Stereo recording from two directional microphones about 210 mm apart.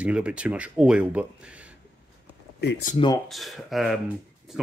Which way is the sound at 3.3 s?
Centre (ahead or behind).